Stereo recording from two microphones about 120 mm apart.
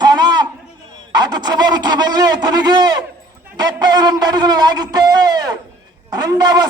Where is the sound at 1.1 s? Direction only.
35° right (ahead or behind).